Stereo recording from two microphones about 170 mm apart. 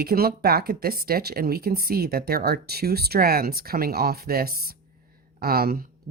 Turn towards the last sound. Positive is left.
turn(degrees=-60)  # may be behind; listen again after turning